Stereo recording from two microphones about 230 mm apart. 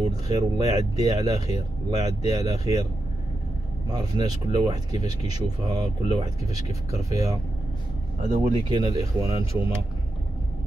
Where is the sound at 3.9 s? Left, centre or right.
Centre.